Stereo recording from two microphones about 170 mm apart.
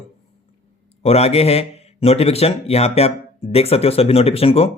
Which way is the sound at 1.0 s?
35° left (ahead or behind).